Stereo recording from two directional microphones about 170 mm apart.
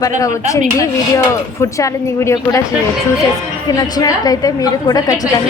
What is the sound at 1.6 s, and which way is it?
A woman's voice, 20° left (ahead or behind).